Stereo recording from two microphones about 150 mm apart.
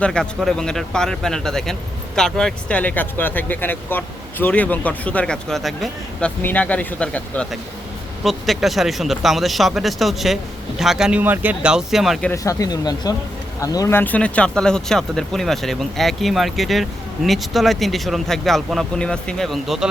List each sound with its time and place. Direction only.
0.0 s speech: 5° left (ahead or behind)
12.3 s speech: 20° left (ahead or behind); by 19.9 s centre (ahead or behind)